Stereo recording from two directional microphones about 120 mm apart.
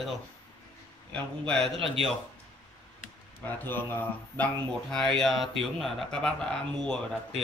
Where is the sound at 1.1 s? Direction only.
5° left (ahead or behind).